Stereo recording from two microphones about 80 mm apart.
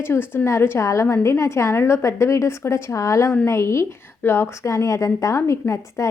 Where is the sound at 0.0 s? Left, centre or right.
Left.